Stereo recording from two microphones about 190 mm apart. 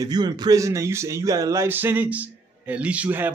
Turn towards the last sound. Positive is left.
turn(degrees=-10)  # may be behind; listen again after turning